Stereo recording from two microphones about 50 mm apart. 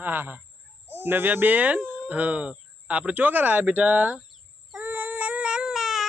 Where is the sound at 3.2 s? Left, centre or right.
Right.